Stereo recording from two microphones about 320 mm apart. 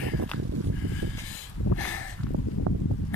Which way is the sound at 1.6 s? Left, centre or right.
Left.